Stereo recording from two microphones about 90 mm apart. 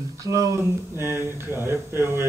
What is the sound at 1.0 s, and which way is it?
Speech, 25° right (ahead or behind).